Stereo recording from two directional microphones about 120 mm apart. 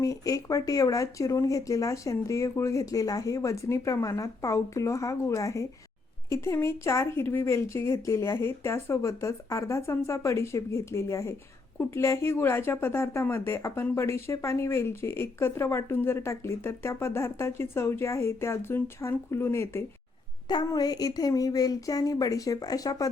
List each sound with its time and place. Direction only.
0.0 s a woman's voice: 25° left (ahead or behind)
20.7 s speech: 35° left (ahead or behind)